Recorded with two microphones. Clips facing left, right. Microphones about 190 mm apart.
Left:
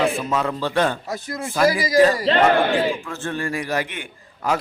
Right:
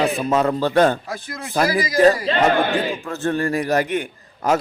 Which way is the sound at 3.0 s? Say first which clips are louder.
Right 5 dB; 40° right (ahead or behind).